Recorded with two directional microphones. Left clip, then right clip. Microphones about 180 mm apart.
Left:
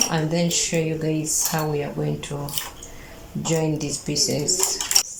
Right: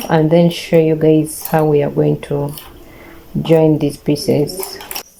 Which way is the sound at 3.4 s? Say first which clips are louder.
Right 13 dB; 50° right (ahead or behind).